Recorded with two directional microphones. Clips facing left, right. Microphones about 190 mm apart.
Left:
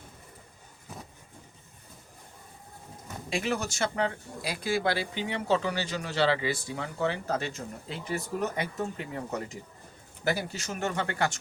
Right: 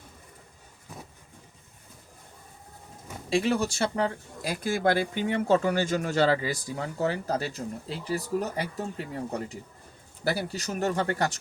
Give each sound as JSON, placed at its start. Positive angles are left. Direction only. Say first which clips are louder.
{"t": 3.2, "sound": "speech", "louder": "right 5 dB", "side_deg": -30}